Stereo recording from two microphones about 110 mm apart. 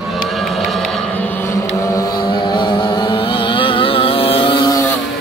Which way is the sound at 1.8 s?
30° left (ahead or behind).